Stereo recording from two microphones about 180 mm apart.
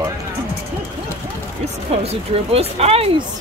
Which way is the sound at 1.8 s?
35° right (ahead or behind).